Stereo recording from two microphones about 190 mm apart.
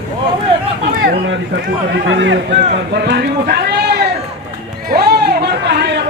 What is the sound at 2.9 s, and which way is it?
Speech, 60° right (ahead or behind).